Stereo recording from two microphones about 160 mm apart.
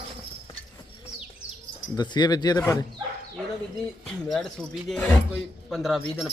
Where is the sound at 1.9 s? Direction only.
25° left (ahead or behind).